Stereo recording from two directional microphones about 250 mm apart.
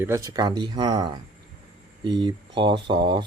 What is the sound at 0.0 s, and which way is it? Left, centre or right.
Speech, centre.